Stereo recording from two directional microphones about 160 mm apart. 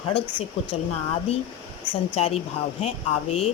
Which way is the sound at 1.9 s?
40° left (ahead or behind).